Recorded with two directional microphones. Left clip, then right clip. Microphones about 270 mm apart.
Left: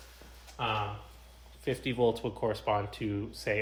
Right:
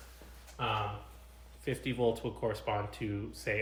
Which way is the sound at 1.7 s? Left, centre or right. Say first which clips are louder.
Left 3 dB; left.